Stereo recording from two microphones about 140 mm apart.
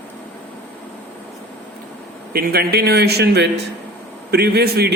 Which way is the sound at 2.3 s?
90° right.